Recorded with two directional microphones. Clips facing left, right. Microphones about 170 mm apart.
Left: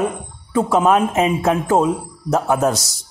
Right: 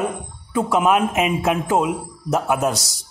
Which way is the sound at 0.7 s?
35° left (ahead or behind).